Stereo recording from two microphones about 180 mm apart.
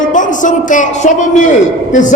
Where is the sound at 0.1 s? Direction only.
45° left (ahead or behind).